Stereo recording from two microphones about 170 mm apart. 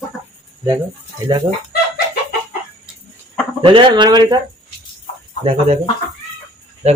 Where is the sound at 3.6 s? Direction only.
30° right (ahead or behind).